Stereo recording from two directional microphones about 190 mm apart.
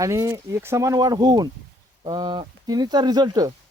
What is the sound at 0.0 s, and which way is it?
Speech, 15° right (ahead or behind).